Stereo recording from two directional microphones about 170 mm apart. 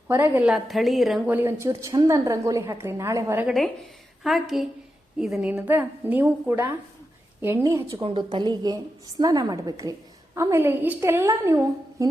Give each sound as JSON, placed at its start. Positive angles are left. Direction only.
{"t": 0.1, "sound": "a woman's voice", "side_deg": -10}
{"t": 1.4, "sound": "a woman's voice", "side_deg": -15}
{"t": 4.2, "sound": "a woman's voice", "side_deg": 0}
{"t": 8.0, "sound": "a woman's voice", "side_deg": -30}